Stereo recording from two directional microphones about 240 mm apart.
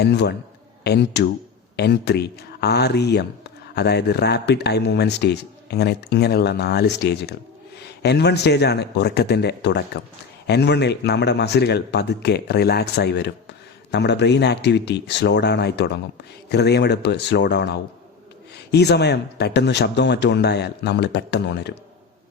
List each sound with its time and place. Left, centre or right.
0.0 s speech: left